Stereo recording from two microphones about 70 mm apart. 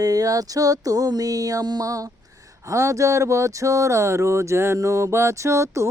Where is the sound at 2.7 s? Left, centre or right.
Right.